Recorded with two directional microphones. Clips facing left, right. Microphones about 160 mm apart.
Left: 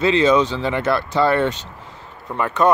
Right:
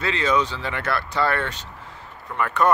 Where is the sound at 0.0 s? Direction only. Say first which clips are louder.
Left 7 dB; 25° left (ahead or behind).